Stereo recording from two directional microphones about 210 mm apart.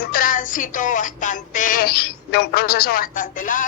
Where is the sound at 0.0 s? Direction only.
45° left (ahead or behind).